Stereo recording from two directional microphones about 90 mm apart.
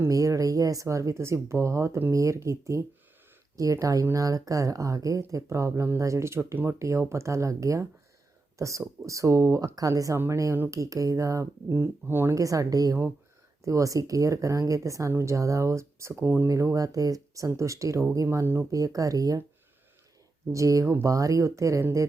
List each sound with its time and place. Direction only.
0.1 s speech: 40° right (ahead or behind)
16.5 s speech: 35° right (ahead or behind)
18.7 s speech: 40° right (ahead or behind)
20.5 s speech: 35° right (ahead or behind)